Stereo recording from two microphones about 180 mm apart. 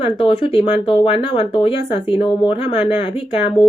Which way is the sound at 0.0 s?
30° left (ahead or behind).